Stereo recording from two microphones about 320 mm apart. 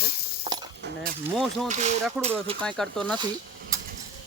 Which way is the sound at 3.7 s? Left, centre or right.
Centre.